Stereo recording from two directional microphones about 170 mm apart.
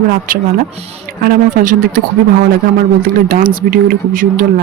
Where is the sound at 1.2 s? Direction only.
55° right (ahead or behind).